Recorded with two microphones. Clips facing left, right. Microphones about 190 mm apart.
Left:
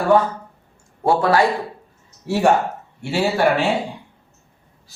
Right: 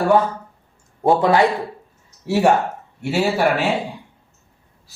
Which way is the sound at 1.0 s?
20° right (ahead or behind).